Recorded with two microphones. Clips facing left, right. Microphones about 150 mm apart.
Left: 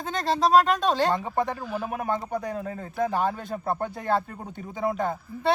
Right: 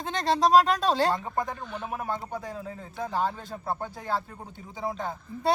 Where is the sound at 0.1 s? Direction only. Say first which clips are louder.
Even; centre (ahead or behind).